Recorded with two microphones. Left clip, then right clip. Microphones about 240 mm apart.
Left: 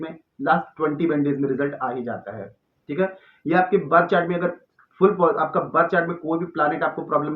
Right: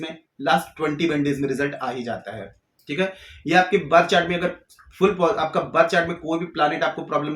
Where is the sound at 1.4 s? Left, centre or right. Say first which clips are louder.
Left 1 dB; right.